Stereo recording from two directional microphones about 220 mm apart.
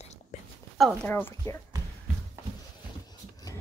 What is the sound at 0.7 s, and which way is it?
Speech, 5° left (ahead or behind).